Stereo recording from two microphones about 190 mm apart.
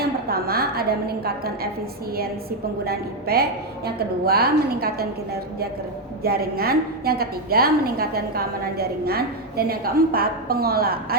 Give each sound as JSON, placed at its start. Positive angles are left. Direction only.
{"t": 0.3, "sound": "a woman's voice", "side_deg": -55}
{"t": 2.8, "sound": "a woman's voice", "side_deg": -55}